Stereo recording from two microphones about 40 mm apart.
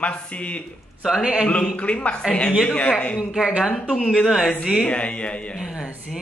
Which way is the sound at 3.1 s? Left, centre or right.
Centre.